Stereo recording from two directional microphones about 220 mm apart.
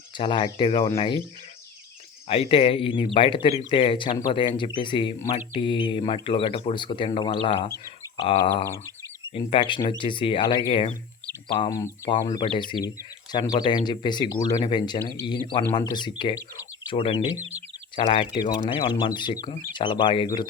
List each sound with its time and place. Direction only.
0.2 s speech: 20° left (ahead or behind)
2.2 s speech: 25° left (ahead or behind)
9.4 s speech: 25° left (ahead or behind)